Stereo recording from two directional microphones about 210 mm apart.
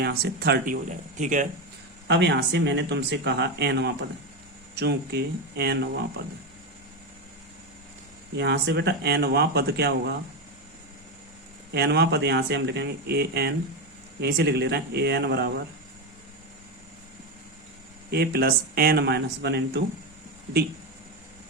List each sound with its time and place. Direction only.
0.0 s speech: 50° right (ahead or behind)
2.0 s speech: 55° right (ahead or behind)
8.4 s speech: 55° right (ahead or behind)
11.7 s speech: 50° right (ahead or behind)
18.1 s speech: 50° right (ahead or behind)